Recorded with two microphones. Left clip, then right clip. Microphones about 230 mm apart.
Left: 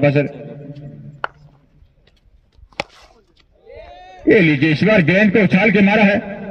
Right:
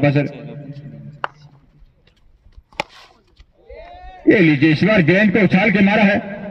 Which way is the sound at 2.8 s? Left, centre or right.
Centre.